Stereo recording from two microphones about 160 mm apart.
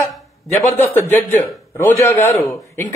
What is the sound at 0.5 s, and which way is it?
Speech, 45° left (ahead or behind).